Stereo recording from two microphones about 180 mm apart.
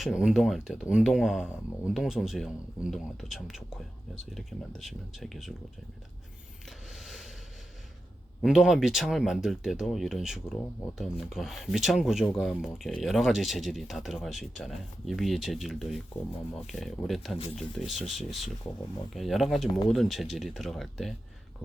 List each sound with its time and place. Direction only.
0.0 s speech: 5° right (ahead or behind)
7.0 s a sound: centre (ahead or behind)
8.4 s speech: 5° right (ahead or behind)
17.3 s speech: 35° left (ahead or behind)
17.6 s speech: centre (ahead or behind)